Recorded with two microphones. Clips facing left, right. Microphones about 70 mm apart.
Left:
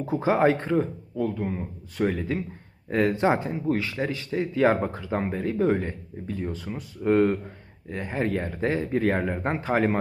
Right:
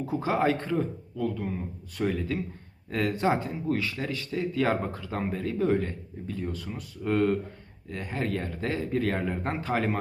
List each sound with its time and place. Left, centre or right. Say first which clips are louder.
0.0 s speech: left 4 dB; left